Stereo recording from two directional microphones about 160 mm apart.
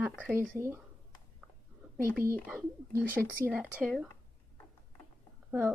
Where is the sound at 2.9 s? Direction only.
15° right (ahead or behind).